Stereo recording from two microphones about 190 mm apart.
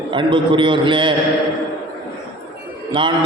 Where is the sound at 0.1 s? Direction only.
25° right (ahead or behind).